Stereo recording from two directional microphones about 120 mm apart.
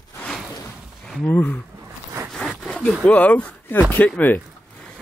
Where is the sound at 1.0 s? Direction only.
5° left (ahead or behind).